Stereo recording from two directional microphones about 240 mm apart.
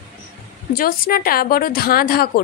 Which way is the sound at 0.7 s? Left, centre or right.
Left.